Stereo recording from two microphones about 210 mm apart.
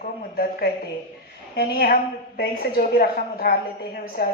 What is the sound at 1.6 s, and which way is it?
A woman's voice, 45° left (ahead or behind).